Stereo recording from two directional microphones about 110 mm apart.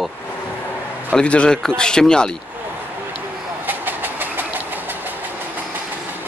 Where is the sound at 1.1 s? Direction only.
10° left (ahead or behind).